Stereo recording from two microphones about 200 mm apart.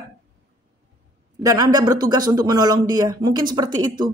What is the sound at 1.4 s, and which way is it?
Speech, 15° right (ahead or behind).